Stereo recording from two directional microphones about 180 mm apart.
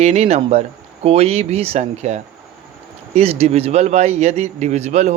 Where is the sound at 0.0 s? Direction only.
35° right (ahead or behind).